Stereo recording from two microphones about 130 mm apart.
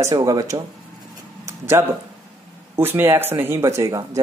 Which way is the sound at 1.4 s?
20° right (ahead or behind).